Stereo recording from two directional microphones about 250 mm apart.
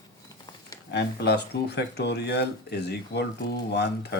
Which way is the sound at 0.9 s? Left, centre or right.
Left.